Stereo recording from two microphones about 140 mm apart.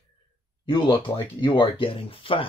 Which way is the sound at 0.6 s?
35° left (ahead or behind).